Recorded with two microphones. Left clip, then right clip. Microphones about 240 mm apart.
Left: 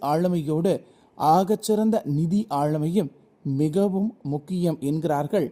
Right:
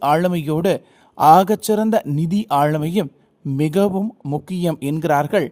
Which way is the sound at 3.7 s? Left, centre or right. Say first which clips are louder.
Right 7 dB; right.